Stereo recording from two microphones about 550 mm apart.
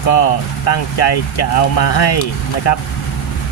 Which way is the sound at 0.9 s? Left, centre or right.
Left.